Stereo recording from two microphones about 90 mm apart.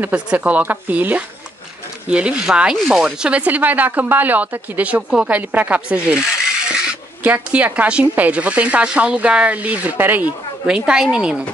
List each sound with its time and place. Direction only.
0.0 s speech: 15° right (ahead or behind)
10.7 s speech: 10° right (ahead or behind)